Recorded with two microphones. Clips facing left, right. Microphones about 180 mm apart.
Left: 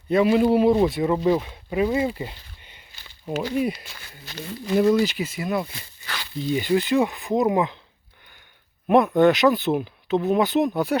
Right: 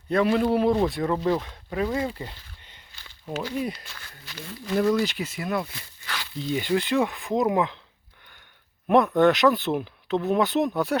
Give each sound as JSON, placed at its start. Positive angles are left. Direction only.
{"t": 0.1, "sound": "speech", "side_deg": 5}
{"t": 5.0, "sound": "speech", "side_deg": 0}
{"t": 9.1, "sound": "speech", "side_deg": 0}